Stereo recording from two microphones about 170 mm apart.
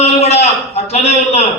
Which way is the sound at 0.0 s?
40° left (ahead or behind).